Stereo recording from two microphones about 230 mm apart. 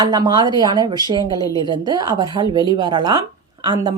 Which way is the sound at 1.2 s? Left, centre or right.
Centre.